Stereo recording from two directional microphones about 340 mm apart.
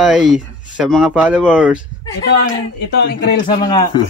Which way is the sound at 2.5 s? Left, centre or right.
Left.